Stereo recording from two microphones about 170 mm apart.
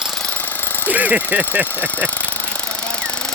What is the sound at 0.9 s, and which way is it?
Speech, 10° right (ahead or behind).